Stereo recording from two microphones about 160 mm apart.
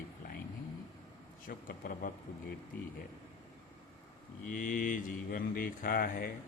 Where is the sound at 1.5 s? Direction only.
60° left (ahead or behind).